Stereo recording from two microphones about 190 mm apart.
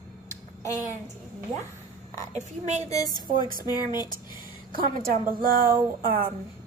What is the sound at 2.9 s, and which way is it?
Speech, 20° left (ahead or behind).